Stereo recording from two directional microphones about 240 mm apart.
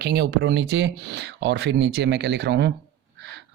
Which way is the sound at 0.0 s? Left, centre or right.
Right.